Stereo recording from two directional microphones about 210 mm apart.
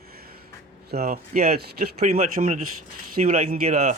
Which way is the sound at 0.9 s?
45° right (ahead or behind).